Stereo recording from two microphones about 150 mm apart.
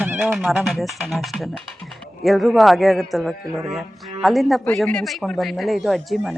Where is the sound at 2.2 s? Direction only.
Centre (ahead or behind).